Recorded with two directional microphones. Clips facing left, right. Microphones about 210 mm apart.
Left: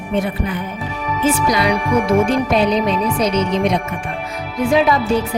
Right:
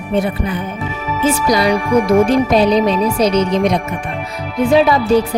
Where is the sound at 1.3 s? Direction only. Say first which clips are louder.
Right 2 dB; 40° right (ahead or behind).